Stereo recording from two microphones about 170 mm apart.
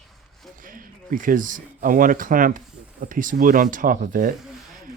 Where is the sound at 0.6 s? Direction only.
55° right (ahead or behind).